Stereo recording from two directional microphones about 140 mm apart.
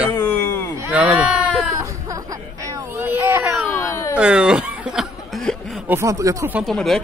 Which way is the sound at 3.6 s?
15° left (ahead or behind).